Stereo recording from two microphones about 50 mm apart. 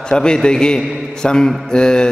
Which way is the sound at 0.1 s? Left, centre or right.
Centre.